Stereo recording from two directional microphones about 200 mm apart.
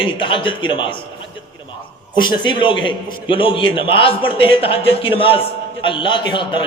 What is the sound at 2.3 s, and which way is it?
A man's voice, 25° left (ahead or behind).